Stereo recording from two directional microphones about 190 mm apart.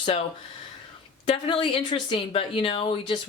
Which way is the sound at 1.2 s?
30° left (ahead or behind).